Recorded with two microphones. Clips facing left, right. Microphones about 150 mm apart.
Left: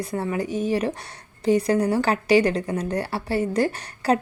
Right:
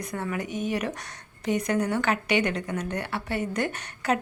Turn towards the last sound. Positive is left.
turn(degrees=35)  # may be behind; listen again after turning